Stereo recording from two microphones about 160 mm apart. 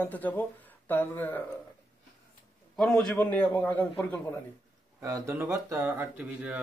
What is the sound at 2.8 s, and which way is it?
A man's voice, 5° left (ahead or behind).